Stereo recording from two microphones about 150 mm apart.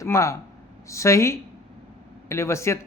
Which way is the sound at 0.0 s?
20° left (ahead or behind).